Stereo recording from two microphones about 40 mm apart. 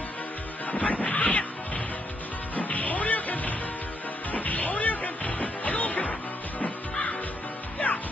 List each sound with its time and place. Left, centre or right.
0.7 s music: left
2.5 s music: left
7.8 s music: left